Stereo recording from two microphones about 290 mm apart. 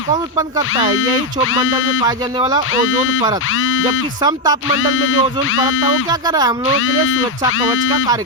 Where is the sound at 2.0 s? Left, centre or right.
Centre.